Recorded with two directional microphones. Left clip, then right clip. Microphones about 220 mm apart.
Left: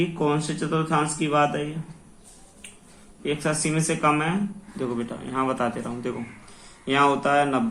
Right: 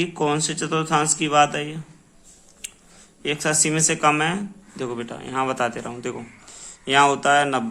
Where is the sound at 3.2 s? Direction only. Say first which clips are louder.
Right 3 dB; 45° right (ahead or behind).